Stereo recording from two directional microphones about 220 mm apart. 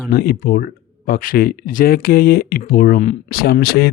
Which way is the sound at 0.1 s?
45° left (ahead or behind).